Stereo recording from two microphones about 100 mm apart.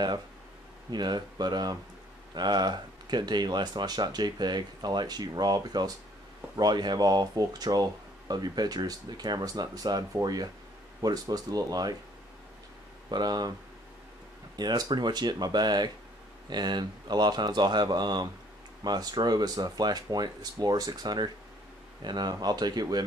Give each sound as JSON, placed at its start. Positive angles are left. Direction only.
{"t": 0.8, "sound": "speech", "side_deg": -45}
{"t": 13.1, "sound": "speech", "side_deg": -45}
{"t": 14.6, "sound": "speech", "side_deg": -45}